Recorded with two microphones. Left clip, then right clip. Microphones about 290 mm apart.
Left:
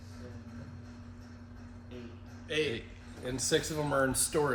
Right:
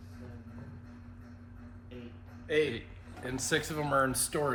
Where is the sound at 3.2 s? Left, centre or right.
Right.